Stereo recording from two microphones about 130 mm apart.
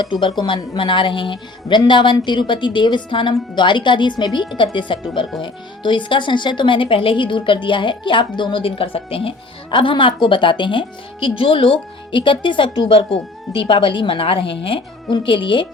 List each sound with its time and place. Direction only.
0.0 s speech: 35° left (ahead or behind)